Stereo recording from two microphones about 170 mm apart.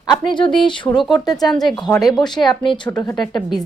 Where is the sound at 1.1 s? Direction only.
25° left (ahead or behind).